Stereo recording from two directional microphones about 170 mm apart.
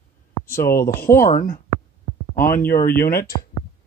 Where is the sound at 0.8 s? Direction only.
15° left (ahead or behind).